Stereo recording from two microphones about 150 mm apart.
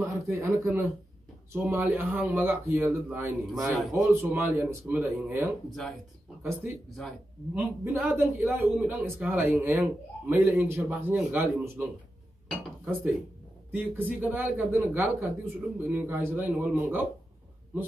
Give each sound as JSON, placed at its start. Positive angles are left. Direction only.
{"t": 0.0, "sound": "a man's voice", "side_deg": -20}
{"t": 7.0, "sound": "speech", "side_deg": 5}
{"t": 7.6, "sound": "a man's voice", "side_deg": -15}
{"t": 13.7, "sound": "a man's voice", "side_deg": -10}